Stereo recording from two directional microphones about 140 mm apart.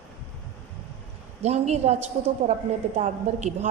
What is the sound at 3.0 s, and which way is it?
Speech, 55° right (ahead or behind).